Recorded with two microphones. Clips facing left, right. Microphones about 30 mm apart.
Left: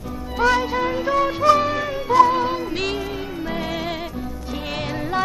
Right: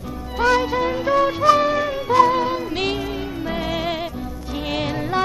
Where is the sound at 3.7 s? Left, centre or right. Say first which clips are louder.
Right 3 dB; right.